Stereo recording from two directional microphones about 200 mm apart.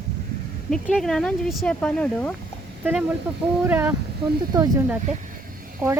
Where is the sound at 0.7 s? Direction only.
Centre (ahead or behind).